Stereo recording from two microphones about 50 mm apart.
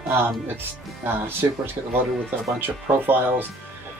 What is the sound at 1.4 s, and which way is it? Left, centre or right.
Speech, right.